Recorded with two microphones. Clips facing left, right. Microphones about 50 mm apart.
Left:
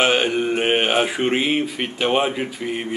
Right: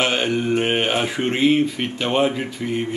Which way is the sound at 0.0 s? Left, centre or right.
Centre.